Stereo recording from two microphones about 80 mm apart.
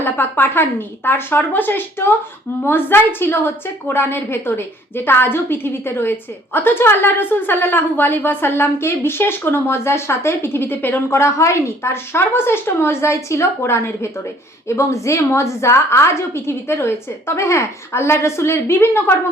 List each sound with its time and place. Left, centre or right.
0.0 s a woman's voice: left